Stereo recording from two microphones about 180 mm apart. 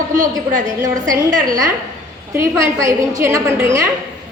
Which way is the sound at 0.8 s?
20° right (ahead or behind).